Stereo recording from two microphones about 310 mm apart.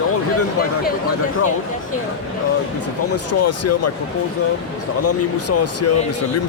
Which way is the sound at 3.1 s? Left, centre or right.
Left.